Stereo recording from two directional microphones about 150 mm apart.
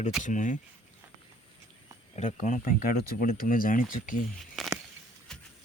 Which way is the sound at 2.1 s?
50° left (ahead or behind).